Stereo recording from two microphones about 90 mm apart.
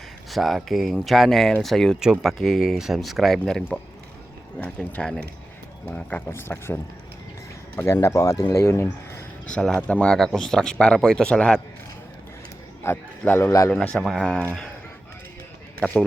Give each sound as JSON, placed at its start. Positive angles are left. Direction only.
{"t": 0.3, "sound": "speech", "side_deg": 0}
{"t": 4.6, "sound": "speech", "side_deg": 15}
{"t": 8.0, "sound": "speech", "side_deg": 35}
{"t": 9.5, "sound": "speech", "side_deg": 15}
{"t": 12.8, "sound": "a man's voice", "side_deg": 30}
{"t": 13.7, "sound": "speech", "side_deg": 10}